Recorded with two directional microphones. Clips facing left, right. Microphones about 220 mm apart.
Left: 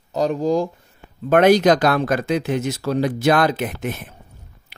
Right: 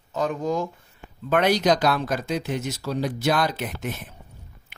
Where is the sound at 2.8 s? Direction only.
60° left (ahead or behind).